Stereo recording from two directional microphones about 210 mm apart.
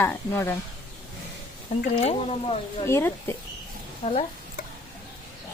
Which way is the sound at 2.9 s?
10° left (ahead or behind).